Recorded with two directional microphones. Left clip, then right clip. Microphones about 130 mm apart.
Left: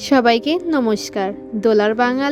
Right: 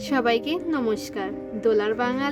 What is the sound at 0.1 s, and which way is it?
A woman's voice, 50° left (ahead or behind).